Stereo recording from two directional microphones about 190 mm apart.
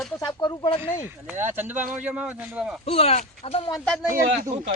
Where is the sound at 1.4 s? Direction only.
10° right (ahead or behind).